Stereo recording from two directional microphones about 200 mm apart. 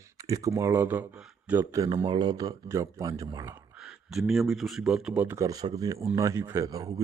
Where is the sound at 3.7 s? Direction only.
Centre (ahead or behind).